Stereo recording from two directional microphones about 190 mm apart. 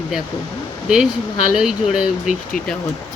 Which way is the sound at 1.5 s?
Centre (ahead or behind).